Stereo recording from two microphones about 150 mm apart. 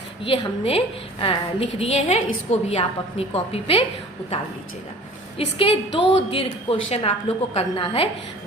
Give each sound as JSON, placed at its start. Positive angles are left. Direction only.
{"t": 0.3, "sound": "a woman's voice", "side_deg": 40}
{"t": 5.5, "sound": "a woman's voice", "side_deg": 40}